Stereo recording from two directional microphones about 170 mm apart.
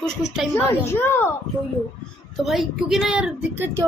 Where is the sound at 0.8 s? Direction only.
15° left (ahead or behind).